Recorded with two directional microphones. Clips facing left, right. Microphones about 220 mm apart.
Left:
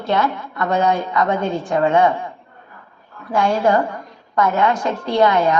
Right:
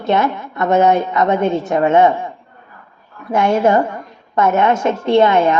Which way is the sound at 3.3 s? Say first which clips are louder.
Right 3 dB; 20° right (ahead or behind).